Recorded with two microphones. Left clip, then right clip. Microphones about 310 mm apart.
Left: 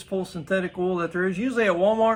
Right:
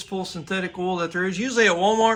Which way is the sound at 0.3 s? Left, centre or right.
Centre.